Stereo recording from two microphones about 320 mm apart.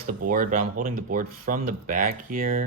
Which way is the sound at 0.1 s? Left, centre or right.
Right.